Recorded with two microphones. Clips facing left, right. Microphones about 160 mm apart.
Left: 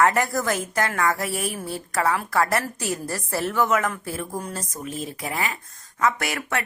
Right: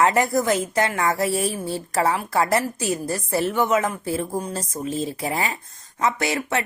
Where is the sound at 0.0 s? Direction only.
20° right (ahead or behind).